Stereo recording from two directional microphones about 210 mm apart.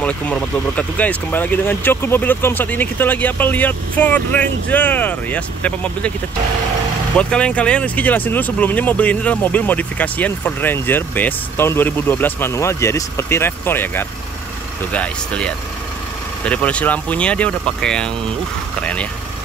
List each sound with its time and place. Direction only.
0.0 s speech: 5° left (ahead or behind)
7.2 s speech: 5° left (ahead or behind)